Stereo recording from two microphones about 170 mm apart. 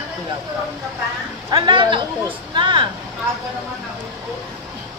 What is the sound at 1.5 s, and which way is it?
A woman's voice, 30° right (ahead or behind).